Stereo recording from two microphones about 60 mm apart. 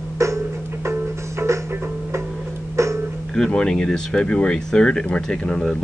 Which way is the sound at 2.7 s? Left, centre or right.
Right.